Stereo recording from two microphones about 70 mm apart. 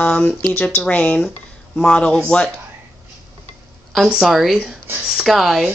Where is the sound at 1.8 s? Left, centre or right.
Centre.